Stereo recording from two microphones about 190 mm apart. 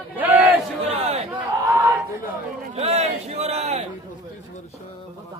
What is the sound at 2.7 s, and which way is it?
A man's voice, 35° right (ahead or behind).